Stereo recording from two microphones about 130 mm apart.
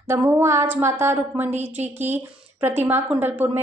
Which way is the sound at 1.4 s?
60° right (ahead or behind).